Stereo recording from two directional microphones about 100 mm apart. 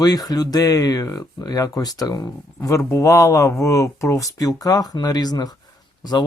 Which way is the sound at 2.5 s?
30° left (ahead or behind).